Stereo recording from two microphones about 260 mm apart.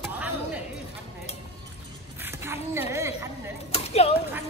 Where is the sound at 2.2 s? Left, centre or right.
Centre.